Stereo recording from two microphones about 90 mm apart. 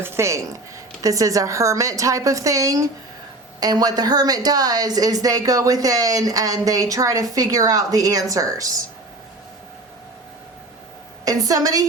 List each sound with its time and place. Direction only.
0.0 s a woman's voice: 30° right (ahead or behind)
11.3 s a woman's voice: 40° right (ahead or behind)